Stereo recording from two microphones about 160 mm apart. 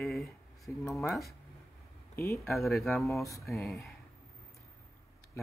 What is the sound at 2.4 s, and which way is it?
Speech, centre (ahead or behind).